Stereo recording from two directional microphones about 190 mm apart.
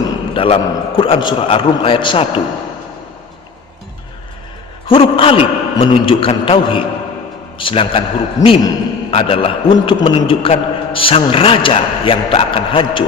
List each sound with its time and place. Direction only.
0.3 s a man's voice: 30° left (ahead or behind)
4.9 s a man's voice: 25° left (ahead or behind)